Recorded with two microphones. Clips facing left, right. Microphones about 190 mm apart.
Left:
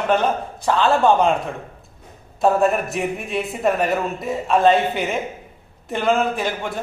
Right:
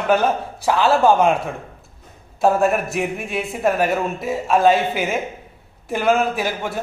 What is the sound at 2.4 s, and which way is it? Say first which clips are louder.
A man's voice: even; centre (ahead or behind).